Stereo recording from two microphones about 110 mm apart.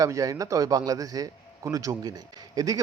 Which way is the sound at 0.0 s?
30° right (ahead or behind).